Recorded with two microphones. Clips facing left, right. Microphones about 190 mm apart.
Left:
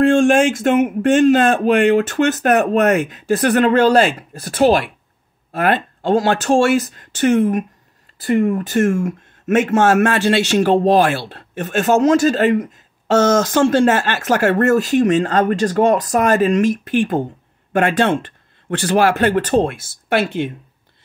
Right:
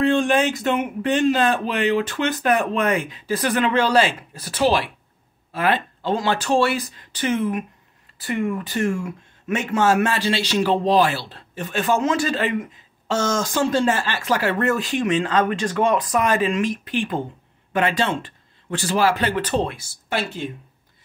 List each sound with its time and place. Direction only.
0.0 s speech: 45° left (ahead or behind)